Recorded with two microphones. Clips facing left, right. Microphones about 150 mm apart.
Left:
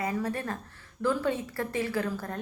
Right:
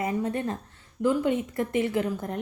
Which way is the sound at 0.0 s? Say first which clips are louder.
Right 3 dB; 25° right (ahead or behind).